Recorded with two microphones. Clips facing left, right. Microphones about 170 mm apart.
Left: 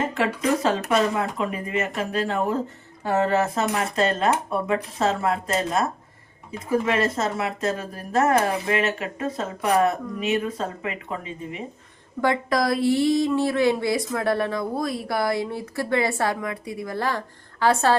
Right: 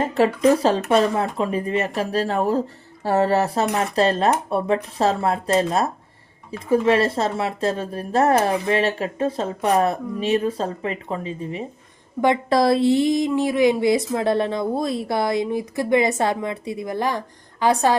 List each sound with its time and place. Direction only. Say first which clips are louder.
0.1 s speech: right 6 dB; 35° right (ahead or behind); by 17.9 s 15° right (ahead or behind)